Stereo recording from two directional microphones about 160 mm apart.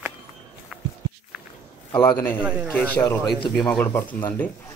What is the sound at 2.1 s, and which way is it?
Speech, 10° left (ahead or behind).